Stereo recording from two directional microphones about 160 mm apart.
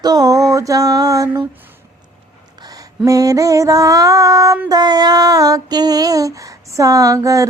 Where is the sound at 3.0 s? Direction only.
20° right (ahead or behind).